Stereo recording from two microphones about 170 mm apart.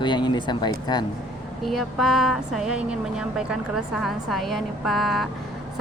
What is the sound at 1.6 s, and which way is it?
Speech, centre (ahead or behind).